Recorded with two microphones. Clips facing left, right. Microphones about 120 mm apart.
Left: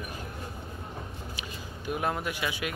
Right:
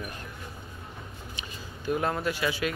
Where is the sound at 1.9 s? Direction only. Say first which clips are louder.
Right 3 dB; 15° left (ahead or behind).